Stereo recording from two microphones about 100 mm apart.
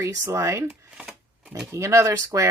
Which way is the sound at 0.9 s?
5° right (ahead or behind).